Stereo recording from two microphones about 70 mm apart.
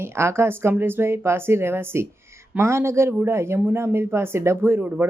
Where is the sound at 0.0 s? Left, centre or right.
Right.